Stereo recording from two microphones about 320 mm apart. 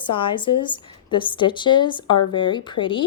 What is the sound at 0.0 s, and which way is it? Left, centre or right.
Speech, centre.